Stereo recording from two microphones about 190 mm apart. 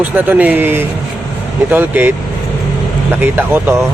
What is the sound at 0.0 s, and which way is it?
Speech, 10° right (ahead or behind).